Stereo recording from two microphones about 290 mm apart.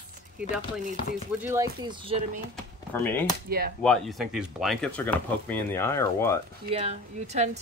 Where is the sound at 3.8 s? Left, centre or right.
Centre.